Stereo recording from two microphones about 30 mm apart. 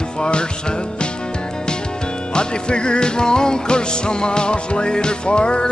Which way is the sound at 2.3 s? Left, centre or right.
Left.